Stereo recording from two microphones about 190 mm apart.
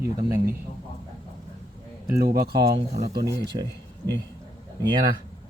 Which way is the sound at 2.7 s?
35° right (ahead or behind).